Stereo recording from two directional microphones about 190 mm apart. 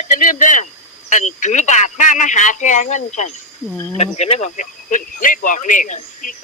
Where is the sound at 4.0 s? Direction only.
35° left (ahead or behind).